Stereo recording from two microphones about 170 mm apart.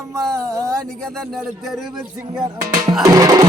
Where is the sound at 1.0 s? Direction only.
5° left (ahead or behind).